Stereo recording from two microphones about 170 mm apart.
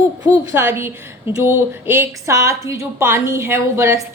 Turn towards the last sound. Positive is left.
turn(degrees=-15)  # may be behind; listen again after turning